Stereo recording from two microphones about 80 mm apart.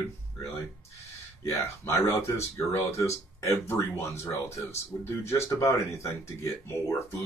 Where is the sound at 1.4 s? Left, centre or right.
Left.